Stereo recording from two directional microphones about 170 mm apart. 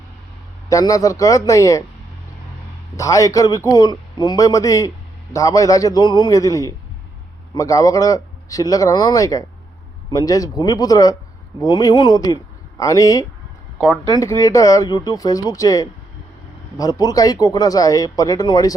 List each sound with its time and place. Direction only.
0.7 s speech: 20° left (ahead or behind)
2.9 s speech: 20° left (ahead or behind)
13.7 s speech: centre (ahead or behind)
14.1 s speech: 20° left (ahead or behind)